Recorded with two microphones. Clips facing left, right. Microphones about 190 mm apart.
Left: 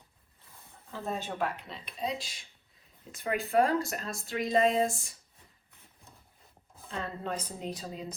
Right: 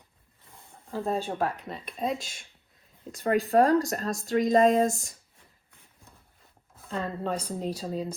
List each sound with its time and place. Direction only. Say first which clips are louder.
0.9 s speech: right 6 dB; 35° right (ahead or behind); by 2.5 s 50° right (ahead or behind)
3.1 s speech: right 7 dB; 35° right (ahead or behind)
6.9 s speech: right 5 dB; 35° right (ahead or behind)